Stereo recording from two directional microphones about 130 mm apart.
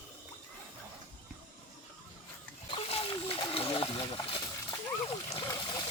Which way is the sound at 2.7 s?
45° left (ahead or behind).